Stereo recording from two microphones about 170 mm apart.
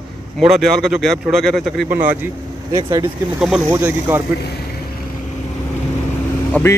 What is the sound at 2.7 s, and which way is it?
Speech, 25° right (ahead or behind).